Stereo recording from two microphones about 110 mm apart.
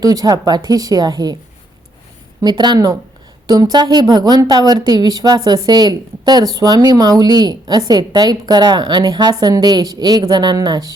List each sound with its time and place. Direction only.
0.0 s a woman's voice: 35° right (ahead or behind)
2.4 s a woman's voice: 40° right (ahead or behind)